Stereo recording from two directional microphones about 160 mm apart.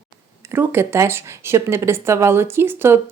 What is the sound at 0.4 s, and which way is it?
Speech, 15° right (ahead or behind).